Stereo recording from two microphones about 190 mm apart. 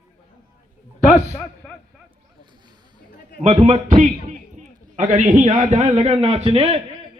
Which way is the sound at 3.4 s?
35° right (ahead or behind).